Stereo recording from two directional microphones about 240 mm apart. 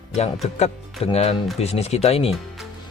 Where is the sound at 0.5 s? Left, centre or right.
Left.